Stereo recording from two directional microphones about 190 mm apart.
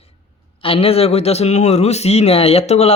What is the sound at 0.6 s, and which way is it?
Speech, 30° left (ahead or behind).